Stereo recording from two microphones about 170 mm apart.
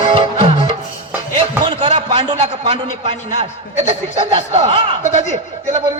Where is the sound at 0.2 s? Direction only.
30° right (ahead or behind).